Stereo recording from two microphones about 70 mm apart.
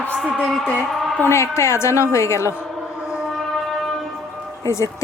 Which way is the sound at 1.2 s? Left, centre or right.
Left.